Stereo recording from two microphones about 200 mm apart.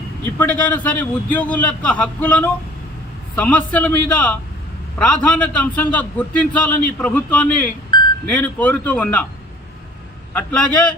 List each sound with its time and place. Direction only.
0.3 s a man's voice: 5° left (ahead or behind)
7.9 s a sound: 20° left (ahead or behind)
8.3 s a man's voice: 5° left (ahead or behind)
10.3 s a man's voice: 5° left (ahead or behind)